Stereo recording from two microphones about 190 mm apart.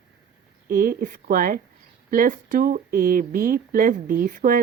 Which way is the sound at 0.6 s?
45° right (ahead or behind).